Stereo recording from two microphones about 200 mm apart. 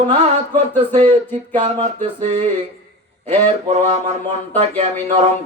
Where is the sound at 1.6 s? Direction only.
35° right (ahead or behind).